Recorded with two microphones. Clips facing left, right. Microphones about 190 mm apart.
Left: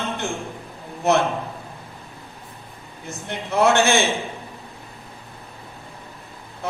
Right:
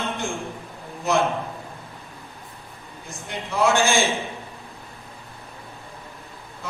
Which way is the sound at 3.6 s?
60° left (ahead or behind).